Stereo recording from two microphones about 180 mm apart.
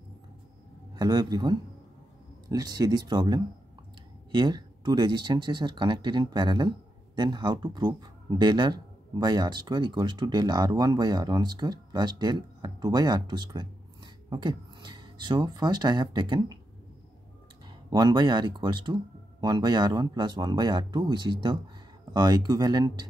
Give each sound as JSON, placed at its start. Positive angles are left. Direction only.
{"t": 0.9, "sound": "speech", "side_deg": -20}
{"t": 17.6, "sound": "speech", "side_deg": -25}